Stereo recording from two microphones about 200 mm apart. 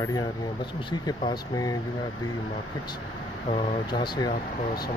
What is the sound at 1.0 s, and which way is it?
Speech, 20° left (ahead or behind).